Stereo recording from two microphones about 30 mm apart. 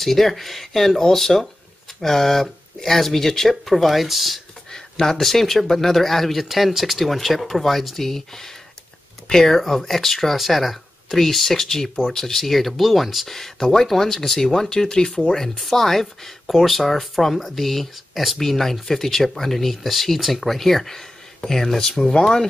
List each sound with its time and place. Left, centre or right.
0.0 s speech: centre
4.6 s a sound: centre
5.2 s speech: centre
10.3 s speech: centre
13.4 s speech: centre
15.6 s speech: centre
18.4 s speech: centre